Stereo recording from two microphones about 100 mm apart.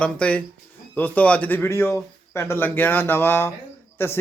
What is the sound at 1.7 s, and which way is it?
A man's voice, 30° left (ahead or behind).